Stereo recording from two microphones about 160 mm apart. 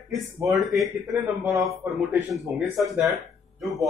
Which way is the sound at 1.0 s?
20° right (ahead or behind).